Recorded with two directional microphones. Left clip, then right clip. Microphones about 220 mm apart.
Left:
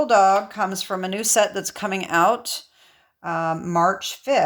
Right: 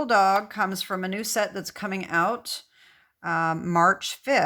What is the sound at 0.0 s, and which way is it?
Speech, 15° right (ahead or behind).